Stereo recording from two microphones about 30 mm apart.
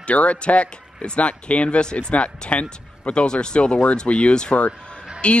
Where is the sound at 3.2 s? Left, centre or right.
Left.